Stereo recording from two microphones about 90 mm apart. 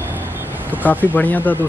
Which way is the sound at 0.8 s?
20° left (ahead or behind).